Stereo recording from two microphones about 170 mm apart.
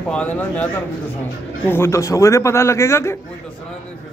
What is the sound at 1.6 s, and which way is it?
A man's voice, 15° left (ahead or behind).